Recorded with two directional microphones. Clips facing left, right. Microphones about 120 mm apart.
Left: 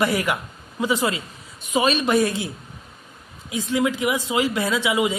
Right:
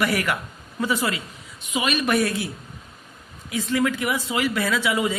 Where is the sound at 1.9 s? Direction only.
25° left (ahead or behind).